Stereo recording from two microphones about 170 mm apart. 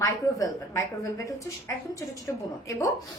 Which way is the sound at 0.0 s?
20° left (ahead or behind).